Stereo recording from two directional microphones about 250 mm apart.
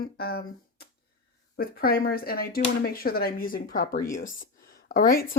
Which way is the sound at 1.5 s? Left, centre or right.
Left.